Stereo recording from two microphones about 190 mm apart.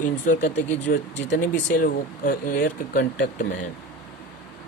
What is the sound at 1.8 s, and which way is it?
Speech, 50° left (ahead or behind).